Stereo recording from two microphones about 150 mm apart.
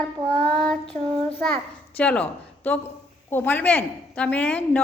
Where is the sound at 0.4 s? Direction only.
5° left (ahead or behind).